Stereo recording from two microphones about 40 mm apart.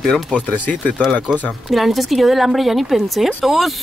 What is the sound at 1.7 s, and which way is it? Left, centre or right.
Speech, centre.